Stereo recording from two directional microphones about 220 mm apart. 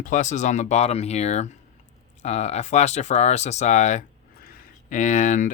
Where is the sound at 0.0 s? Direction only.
35° left (ahead or behind).